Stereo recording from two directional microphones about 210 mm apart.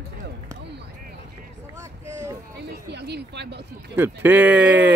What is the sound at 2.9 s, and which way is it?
Speech, 50° right (ahead or behind).